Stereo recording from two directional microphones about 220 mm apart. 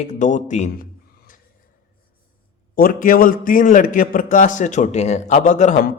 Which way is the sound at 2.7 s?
40° left (ahead or behind).